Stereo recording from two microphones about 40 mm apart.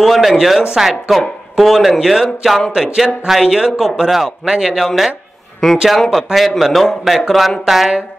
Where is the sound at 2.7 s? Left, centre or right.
Centre.